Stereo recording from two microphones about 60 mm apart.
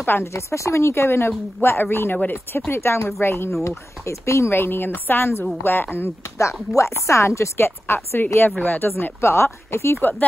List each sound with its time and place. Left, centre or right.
0.0 s a woman's voice: left
0.3 s speech: left
3.6 s speech: left
4.5 s a woman's voice: left
6.3 s speech: left